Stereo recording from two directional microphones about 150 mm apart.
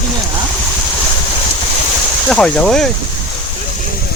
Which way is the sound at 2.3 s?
5° left (ahead or behind).